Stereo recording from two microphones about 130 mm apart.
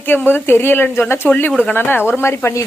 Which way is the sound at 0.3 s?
15° left (ahead or behind).